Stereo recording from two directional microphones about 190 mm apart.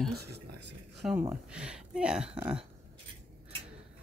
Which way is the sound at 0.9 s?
Centre (ahead or behind).